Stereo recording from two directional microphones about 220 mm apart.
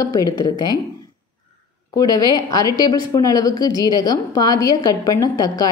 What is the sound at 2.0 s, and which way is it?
A woman's voice, 15° left (ahead or behind).